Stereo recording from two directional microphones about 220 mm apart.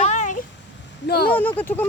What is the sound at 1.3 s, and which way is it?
Speech, 10° left (ahead or behind).